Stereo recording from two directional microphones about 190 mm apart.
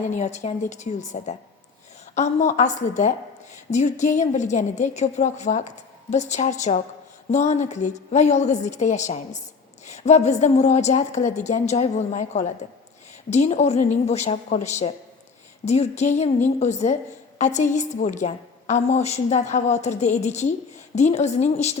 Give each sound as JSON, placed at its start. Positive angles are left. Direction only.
{"t": 0.1, "sound": "a woman's voice", "side_deg": 40}